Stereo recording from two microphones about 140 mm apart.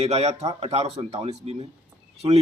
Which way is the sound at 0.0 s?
50° right (ahead or behind).